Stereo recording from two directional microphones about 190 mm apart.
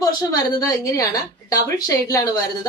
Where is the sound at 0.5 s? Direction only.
15° left (ahead or behind).